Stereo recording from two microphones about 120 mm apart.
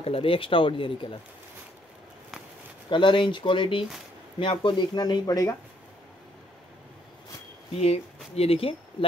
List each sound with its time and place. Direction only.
0.0 s speech: 50° left (ahead or behind)
2.9 s speech: 40° left (ahead or behind)
7.8 s speech: 60° left (ahead or behind)